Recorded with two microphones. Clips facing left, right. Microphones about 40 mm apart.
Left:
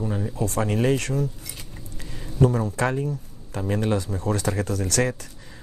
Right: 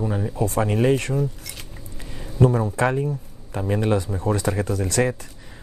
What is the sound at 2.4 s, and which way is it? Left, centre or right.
Speech, right.